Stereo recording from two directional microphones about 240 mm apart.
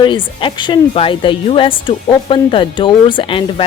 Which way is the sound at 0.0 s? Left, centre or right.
Left.